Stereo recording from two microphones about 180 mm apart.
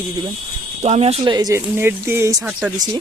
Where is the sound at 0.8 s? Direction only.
35° right (ahead or behind); by 2.7 s 5° right (ahead or behind).